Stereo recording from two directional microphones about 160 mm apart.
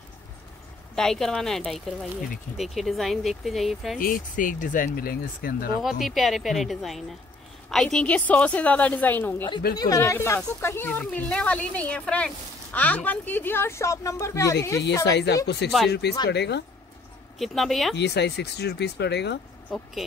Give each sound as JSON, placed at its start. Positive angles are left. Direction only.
{"t": 0.9, "sound": "speech", "side_deg": 5}
{"t": 4.0, "sound": "speech", "side_deg": 55}
{"t": 5.8, "sound": "speech", "side_deg": 0}
{"t": 15.0, "sound": "speech", "side_deg": 90}
{"t": 17.4, "sound": "speech", "side_deg": 0}
{"t": 17.9, "sound": "speech", "side_deg": 90}
{"t": 19.7, "sound": "speech", "side_deg": 0}